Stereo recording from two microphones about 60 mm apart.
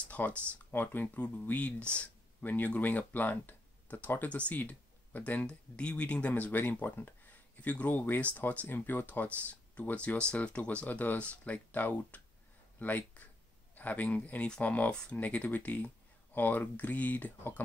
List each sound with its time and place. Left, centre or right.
0.1 s speech: left
10.9 s speech: left